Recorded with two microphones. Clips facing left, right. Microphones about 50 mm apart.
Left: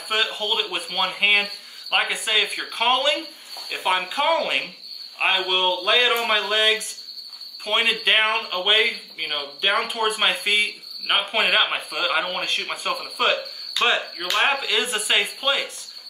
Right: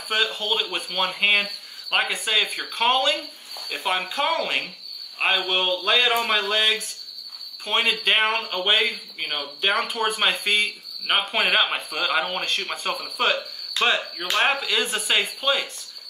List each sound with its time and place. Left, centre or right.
0.1 s speech: centre